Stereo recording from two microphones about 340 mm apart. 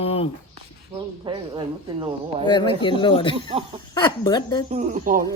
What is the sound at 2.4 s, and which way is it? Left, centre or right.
Speech, centre.